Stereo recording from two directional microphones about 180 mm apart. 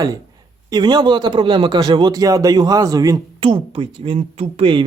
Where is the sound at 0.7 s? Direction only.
25° right (ahead or behind).